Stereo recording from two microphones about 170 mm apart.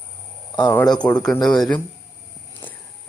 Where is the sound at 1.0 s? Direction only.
5° left (ahead or behind).